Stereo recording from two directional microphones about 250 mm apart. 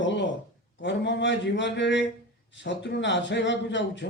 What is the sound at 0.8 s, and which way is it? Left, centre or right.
Speech, left.